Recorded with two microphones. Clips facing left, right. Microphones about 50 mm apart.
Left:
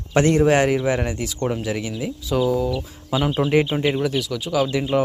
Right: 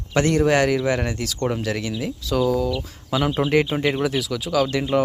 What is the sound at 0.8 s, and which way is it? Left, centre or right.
Speech, centre.